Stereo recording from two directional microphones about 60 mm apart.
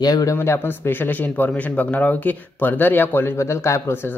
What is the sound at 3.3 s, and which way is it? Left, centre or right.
Speech, left.